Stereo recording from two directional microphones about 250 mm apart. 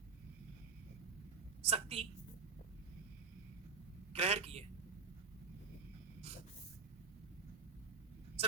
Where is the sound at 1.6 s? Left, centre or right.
Right.